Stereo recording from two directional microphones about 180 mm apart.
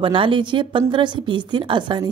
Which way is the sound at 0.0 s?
30° right (ahead or behind).